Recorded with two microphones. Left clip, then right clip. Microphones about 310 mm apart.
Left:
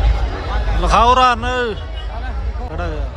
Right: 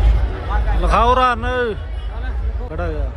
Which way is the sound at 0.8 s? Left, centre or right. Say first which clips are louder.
Left 3 dB; centre.